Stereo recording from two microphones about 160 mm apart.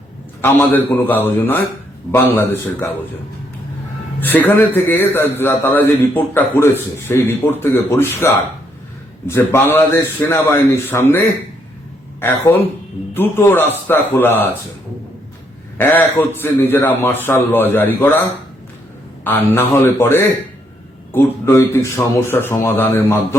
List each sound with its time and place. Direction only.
0.4 s a man's voice: 10° left (ahead or behind)
4.2 s a man's voice: 10° left (ahead or behind)
15.8 s a man's voice: 10° left (ahead or behind)
19.2 s a man's voice: 10° left (ahead or behind)
21.4 s a man's voice: 15° left (ahead or behind)